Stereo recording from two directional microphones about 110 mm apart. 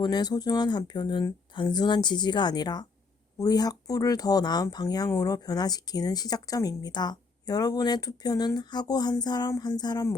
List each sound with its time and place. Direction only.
0.0 s speech: 40° left (ahead or behind)